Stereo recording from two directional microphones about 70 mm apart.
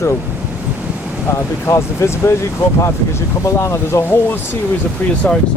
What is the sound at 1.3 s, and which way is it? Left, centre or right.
Speech, left.